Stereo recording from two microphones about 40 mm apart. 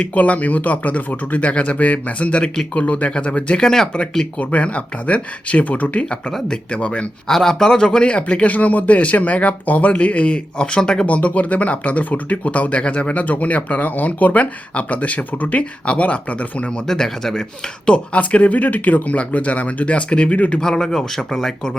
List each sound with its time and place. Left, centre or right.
0.1 s speech: left
3.6 s a man's voice: centre
4.4 s speech: left
6.5 s speech: left
7.3 s speech: centre
11.0 s speech: left
16.8 s a man's voice: centre
17.8 s speech: left
20.6 s a man's voice: centre